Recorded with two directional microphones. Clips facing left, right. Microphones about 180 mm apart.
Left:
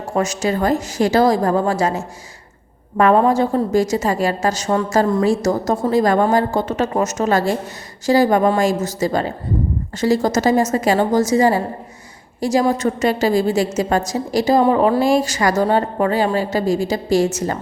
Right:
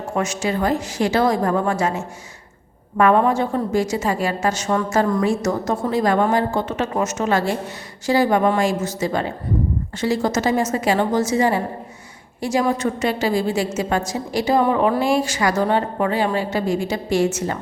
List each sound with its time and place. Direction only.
0.1 s a woman's voice: 40° left (ahead or behind)